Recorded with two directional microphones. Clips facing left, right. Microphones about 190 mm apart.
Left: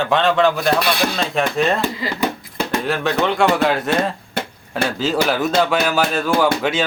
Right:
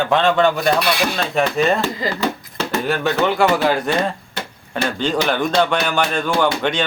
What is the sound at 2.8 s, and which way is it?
Speech, centre (ahead or behind).